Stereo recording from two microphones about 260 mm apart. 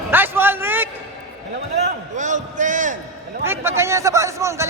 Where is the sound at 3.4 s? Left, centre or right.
Centre.